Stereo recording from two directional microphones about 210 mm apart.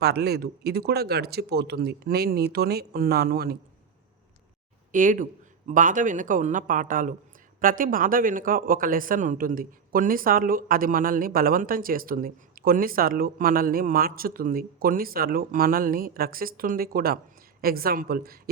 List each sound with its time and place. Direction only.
0.0 s speech: 50° right (ahead or behind)
4.9 s a man's voice: 40° right (ahead or behind)